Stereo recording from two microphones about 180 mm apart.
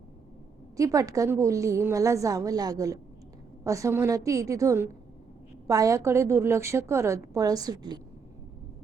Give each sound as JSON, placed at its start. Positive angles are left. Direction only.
{"t": 0.8, "sound": "a woman's voice", "side_deg": -20}